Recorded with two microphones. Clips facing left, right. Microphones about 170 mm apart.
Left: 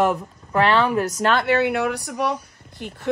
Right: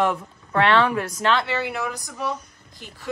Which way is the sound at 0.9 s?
40° left (ahead or behind).